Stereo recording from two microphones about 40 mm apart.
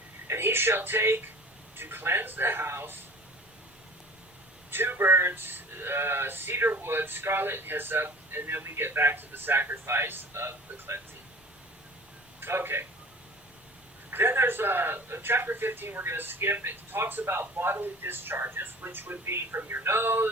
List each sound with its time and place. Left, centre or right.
0.3 s speech: right
1.7 s speech: right
4.7 s speech: right
12.4 s a man's voice: right
14.1 s speech: right